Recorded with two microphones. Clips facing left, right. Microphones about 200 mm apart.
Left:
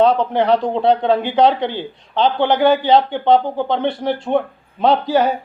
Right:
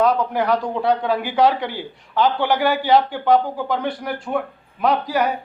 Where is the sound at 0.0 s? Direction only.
25° left (ahead or behind).